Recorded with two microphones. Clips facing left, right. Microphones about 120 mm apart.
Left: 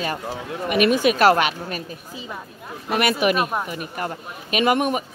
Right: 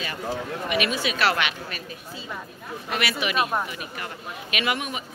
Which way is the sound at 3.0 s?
50° left (ahead or behind).